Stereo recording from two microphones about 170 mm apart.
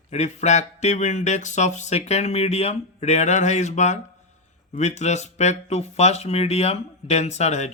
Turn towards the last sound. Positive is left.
turn(degrees=40)  # may be behind; listen again after turning